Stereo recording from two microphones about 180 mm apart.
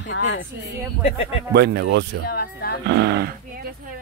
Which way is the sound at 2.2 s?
60° left (ahead or behind).